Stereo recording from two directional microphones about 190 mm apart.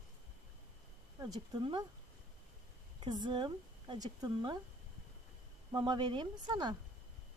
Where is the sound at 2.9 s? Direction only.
25° right (ahead or behind).